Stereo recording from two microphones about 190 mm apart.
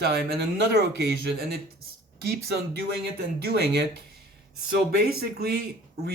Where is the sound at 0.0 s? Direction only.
60° right (ahead or behind).